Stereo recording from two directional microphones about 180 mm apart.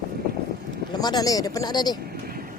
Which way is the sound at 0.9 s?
20° left (ahead or behind).